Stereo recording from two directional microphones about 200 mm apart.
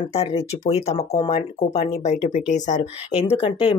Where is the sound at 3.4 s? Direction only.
25° left (ahead or behind).